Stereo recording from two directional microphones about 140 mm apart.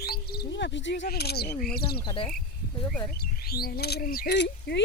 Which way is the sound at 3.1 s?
90° left.